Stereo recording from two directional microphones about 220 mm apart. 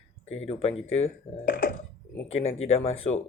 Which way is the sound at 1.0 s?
40° left (ahead or behind).